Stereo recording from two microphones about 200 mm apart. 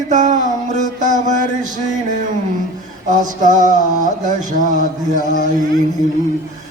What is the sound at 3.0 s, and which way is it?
Mantra, 40° right (ahead or behind).